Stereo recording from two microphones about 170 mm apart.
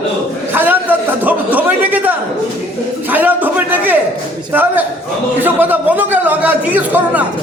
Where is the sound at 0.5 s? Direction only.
10° right (ahead or behind).